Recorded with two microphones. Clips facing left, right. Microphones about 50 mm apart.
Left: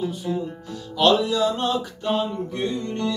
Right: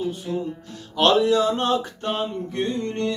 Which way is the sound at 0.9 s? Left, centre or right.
Right.